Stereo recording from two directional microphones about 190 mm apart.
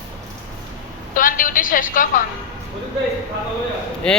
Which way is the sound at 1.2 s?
45° left (ahead or behind).